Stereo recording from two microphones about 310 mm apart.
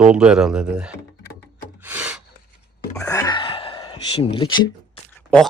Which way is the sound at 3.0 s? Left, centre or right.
Centre.